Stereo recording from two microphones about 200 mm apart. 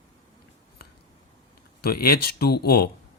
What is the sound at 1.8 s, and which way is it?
Speech, 50° left (ahead or behind).